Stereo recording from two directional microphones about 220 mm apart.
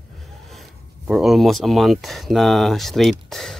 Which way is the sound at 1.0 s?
Centre (ahead or behind).